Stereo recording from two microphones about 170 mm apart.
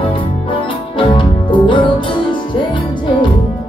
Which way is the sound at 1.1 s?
30° left (ahead or behind).